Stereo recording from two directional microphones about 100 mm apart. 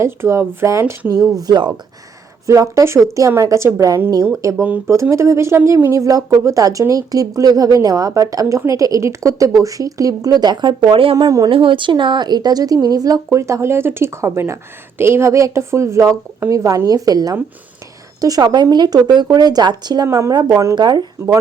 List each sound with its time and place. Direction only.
0.0 s speech: 30° right (ahead or behind)
1.4 s speech: 45° right (ahead or behind)
2.5 s speech: 30° right (ahead or behind); by 10.9 s 45° right (ahead or behind)
10.9 s speech: 60° right (ahead or behind)
11.3 s speech: 35° right (ahead or behind)
11.5 s speech: 60° right (ahead or behind); by 20.1 s 45° right (ahead or behind)
20.1 s speech: 30° right (ahead or behind)
20.7 s speech: 50° right (ahead or behind)